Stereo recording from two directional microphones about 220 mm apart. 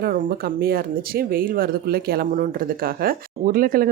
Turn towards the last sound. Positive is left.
turn(degrees=-40)  # may be behind; listen again after turning